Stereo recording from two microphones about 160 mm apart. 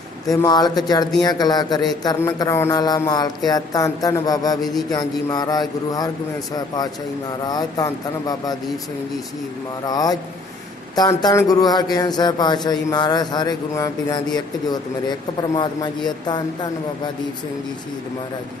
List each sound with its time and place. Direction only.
0.3 s a man's voice: 25° left (ahead or behind)
4.6 s a man's voice: centre (ahead or behind)
4.9 s a man's voice: 25° left (ahead or behind)
9.8 s a man's voice: 25° left (ahead or behind)